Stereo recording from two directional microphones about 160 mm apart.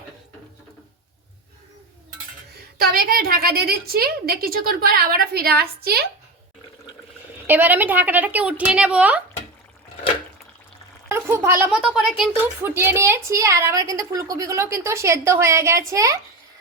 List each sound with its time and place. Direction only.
2.7 s a woman's voice: 65° right (ahead or behind)
7.4 s a woman's voice: 10° right (ahead or behind)
11.1 s speech: 15° right (ahead or behind)
12.6 s a woman's voice: 15° right (ahead or behind)